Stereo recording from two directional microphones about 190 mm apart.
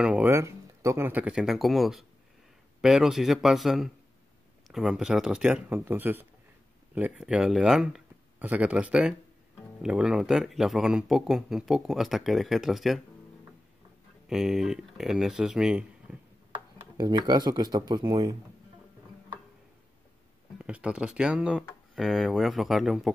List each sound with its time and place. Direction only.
0.0 s speech: 10° right (ahead or behind)
14.2 s speech: centre (ahead or behind)
16.9 s speech: 20° right (ahead or behind)
20.5 s speech: 5° right (ahead or behind)